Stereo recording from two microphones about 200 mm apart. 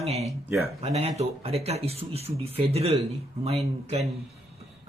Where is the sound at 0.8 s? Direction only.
30° right (ahead or behind).